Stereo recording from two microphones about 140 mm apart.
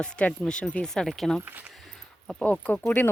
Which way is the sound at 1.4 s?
10° right (ahead or behind).